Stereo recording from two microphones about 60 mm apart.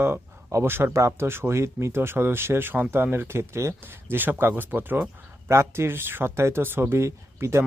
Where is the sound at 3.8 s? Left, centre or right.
Right.